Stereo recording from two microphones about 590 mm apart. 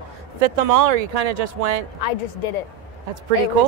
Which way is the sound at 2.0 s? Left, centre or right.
Left.